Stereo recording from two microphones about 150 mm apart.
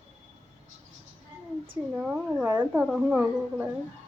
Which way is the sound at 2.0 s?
10° right (ahead or behind).